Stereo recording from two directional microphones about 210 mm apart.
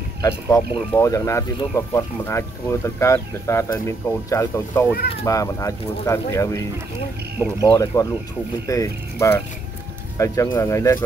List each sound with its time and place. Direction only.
0.2 s speech: 15° left (ahead or behind)
7.6 s speech: 15° left (ahead or behind)